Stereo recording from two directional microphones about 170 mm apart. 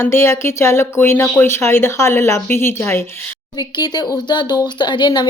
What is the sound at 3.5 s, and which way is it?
Speech, 25° left (ahead or behind).